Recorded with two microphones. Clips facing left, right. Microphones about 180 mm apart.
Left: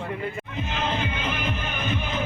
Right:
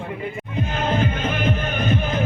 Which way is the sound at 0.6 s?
45° right (ahead or behind).